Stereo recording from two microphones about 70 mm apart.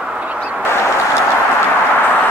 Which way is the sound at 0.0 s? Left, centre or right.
Centre.